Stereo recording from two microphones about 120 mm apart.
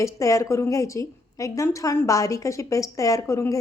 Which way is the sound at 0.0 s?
25° left (ahead or behind).